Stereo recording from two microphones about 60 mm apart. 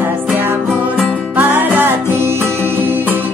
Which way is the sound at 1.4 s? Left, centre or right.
Right.